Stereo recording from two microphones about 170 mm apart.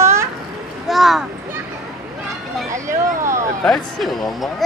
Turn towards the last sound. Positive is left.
turn(degrees=0)  # may be behind; listen again after turning